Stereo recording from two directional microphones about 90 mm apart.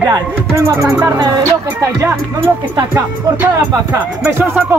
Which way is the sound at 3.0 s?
20° right (ahead or behind).